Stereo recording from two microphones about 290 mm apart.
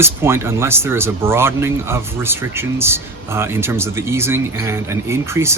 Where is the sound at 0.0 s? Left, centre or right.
Centre.